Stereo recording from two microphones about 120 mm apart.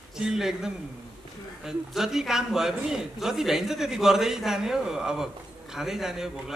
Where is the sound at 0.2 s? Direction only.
5° right (ahead or behind).